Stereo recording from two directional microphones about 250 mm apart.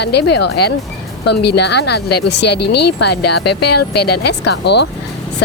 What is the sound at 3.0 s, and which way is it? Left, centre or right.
Speech, left.